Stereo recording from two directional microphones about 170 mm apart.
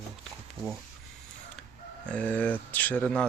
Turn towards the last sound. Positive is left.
turn(degrees=5)  # may be behind; listen again after turning